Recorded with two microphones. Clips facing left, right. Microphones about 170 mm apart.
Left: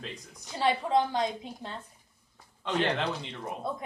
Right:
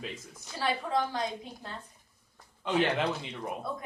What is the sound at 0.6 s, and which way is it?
Speech, 20° left (ahead or behind).